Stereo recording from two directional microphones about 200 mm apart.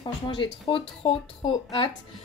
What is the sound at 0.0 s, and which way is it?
A woman's voice, 20° left (ahead or behind).